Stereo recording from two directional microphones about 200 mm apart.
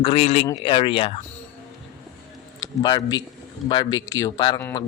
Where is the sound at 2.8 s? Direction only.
20° left (ahead or behind).